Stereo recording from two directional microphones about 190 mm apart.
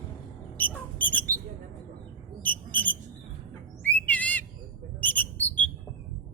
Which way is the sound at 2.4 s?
10° left (ahead or behind).